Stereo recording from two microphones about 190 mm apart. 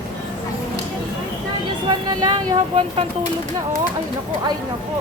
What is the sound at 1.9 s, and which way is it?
Speech, 25° right (ahead or behind).